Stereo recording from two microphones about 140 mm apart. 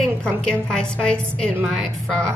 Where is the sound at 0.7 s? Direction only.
5° left (ahead or behind).